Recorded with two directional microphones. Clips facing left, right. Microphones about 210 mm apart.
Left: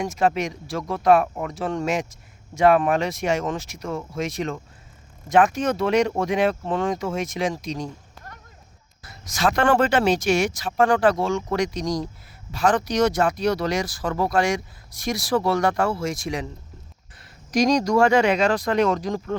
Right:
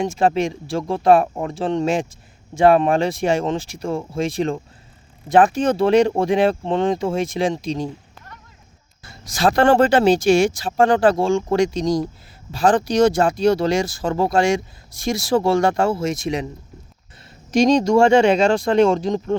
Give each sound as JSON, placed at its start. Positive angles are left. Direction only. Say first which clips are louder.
{"t": 0.0, "sound": "speech", "louder": "right 4 dB", "side_deg": -30}
{"t": 9.0, "sound": "speech", "louder": "right 4 dB", "side_deg": -30}
{"t": 17.5, "sound": "speech", "louder": "right 4 dB", "side_deg": -25}